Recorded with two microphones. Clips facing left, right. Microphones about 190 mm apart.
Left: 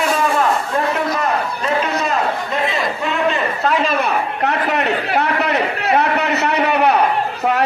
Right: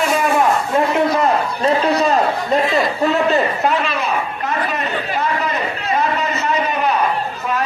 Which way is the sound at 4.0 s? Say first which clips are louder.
Left 3 dB; 65° left (ahead or behind).